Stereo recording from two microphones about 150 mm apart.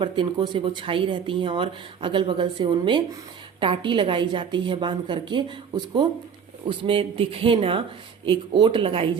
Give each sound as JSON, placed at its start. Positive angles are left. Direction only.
{"t": 0.0, "sound": "speech", "side_deg": -30}